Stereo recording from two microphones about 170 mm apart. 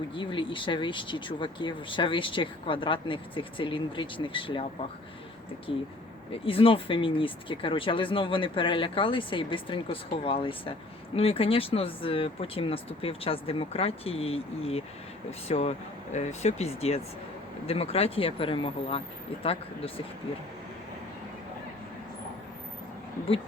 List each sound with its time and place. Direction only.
0.1 s speech: 30° left (ahead or behind)
5.7 s speech: 30° left (ahead or behind)